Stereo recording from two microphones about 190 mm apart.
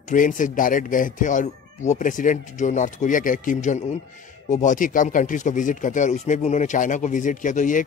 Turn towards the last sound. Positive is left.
turn(degrees=40)  # may be behind; listen again after turning